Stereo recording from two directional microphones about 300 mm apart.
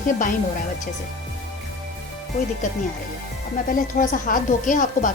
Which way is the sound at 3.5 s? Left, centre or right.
Left.